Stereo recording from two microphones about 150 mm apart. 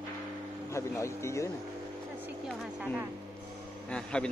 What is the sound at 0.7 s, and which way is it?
Speech, 20° left (ahead or behind).